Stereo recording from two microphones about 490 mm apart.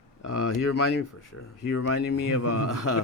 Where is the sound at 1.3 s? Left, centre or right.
Left.